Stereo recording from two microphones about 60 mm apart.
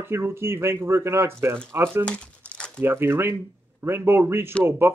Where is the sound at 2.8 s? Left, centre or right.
Right.